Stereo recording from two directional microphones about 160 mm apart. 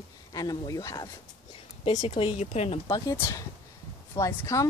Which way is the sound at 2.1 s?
45° left (ahead or behind).